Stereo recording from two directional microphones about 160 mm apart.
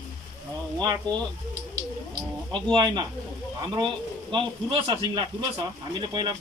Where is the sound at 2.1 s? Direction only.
30° right (ahead or behind).